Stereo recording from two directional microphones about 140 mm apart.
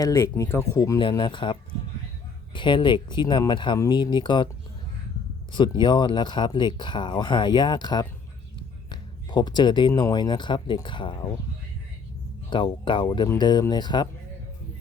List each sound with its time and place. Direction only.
0.0 s speech: 20° left (ahead or behind)
5.5 s speech: 35° left (ahead or behind)
12.5 s speech: 35° left (ahead or behind)